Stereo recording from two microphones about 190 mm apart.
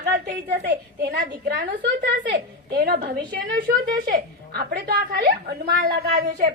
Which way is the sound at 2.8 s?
55° right (ahead or behind).